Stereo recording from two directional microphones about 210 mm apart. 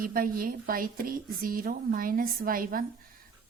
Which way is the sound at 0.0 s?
45° right (ahead or behind).